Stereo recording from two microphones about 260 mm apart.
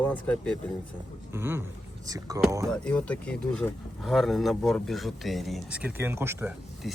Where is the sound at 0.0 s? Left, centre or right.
Centre.